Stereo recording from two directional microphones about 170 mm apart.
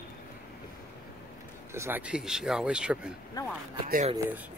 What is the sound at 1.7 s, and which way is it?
Speech, 15° right (ahead or behind).